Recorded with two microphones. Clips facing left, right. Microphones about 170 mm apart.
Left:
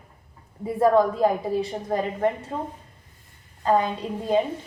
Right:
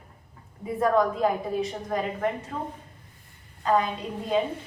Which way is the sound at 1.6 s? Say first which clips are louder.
Left 3 dB; 30° left (ahead or behind).